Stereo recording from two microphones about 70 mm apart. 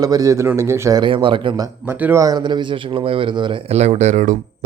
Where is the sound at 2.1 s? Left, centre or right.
Right.